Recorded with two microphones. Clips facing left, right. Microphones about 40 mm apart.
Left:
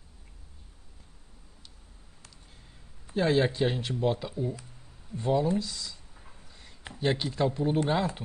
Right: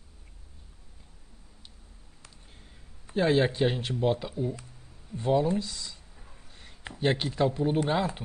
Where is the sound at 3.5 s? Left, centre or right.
Centre.